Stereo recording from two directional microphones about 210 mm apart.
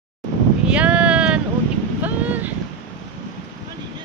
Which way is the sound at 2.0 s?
10° right (ahead or behind).